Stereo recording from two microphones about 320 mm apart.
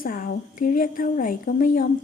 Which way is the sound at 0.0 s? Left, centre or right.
Left.